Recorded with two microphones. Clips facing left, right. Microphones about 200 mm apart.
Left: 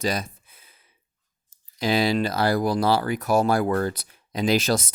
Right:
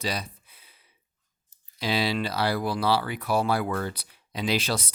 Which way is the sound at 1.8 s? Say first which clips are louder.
Left 5 dB; 45° left (ahead or behind).